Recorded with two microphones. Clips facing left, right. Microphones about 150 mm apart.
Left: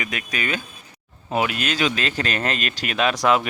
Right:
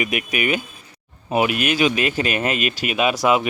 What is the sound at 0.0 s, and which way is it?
Speech, 15° right (ahead or behind).